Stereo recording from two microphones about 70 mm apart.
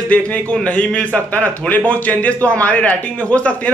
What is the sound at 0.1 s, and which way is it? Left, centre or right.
A man's voice, centre.